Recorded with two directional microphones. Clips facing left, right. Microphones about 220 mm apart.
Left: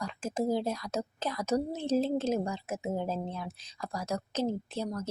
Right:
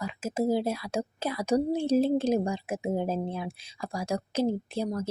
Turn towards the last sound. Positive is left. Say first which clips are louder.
# right 4 dB
turn(degrees=-10)  # may be behind; listen again after turning